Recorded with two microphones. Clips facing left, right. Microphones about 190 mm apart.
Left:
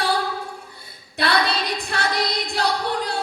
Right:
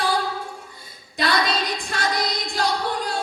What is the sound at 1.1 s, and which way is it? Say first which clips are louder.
Speech: left 1 dB; 65° left (ahead or behind).